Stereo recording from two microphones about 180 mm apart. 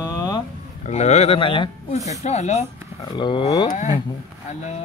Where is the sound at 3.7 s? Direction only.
40° left (ahead or behind).